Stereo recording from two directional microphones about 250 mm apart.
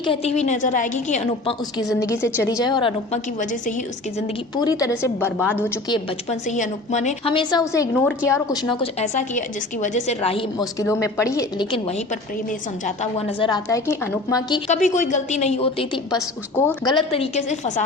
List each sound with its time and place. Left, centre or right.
0.0 s a woman's voice: left
3.5 s a woman's voice: left
4.5 s a woman's voice: centre
6.5 s a woman's voice: left; by 14.6 s centre
14.7 s a woman's voice: left